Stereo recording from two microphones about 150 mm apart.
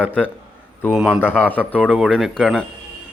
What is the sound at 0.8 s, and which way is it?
Speech, 5° right (ahead or behind).